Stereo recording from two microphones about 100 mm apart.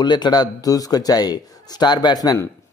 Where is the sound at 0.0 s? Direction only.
50° left (ahead or behind).